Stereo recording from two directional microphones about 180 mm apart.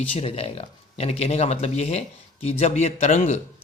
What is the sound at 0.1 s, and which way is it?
Speech, 35° left (ahead or behind).